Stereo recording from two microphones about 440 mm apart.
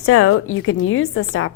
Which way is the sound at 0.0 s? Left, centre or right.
Left.